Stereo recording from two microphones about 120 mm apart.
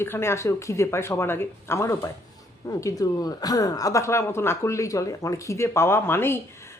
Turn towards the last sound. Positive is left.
turn(degrees=20)  # may be behind; listen again after turning